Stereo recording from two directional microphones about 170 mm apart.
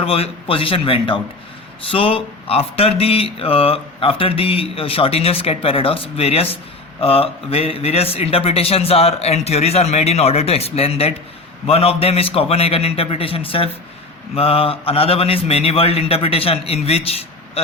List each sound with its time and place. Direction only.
0.0 s speech: 35° left (ahead or behind)